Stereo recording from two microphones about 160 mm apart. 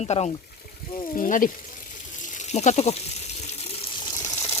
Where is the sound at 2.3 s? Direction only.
45° left (ahead or behind).